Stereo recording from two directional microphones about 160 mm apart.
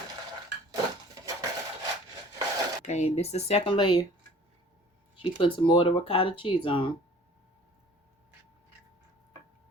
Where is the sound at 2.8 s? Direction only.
45° left (ahead or behind); by 4.1 s 30° left (ahead or behind).